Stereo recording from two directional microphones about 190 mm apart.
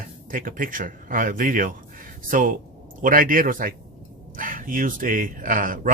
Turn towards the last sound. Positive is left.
turn(degrees=-45)  # may be behind; listen again after turning